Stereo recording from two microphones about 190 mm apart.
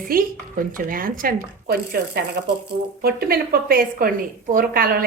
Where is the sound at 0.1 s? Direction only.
50° right (ahead or behind).